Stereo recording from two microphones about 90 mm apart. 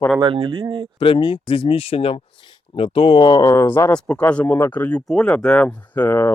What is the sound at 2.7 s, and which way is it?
Speech, 75° left (ahead or behind).